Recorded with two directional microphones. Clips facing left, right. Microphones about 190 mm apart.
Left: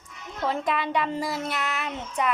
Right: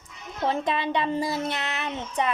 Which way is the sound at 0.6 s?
25° right (ahead or behind).